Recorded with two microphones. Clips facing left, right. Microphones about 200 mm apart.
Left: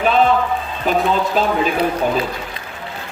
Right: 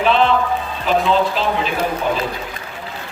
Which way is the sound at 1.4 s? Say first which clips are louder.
Left 3 dB; 45° left (ahead or behind).